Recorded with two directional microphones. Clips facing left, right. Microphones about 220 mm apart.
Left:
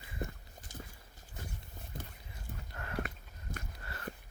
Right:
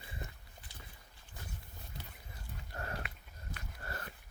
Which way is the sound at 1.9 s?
50° left (ahead or behind).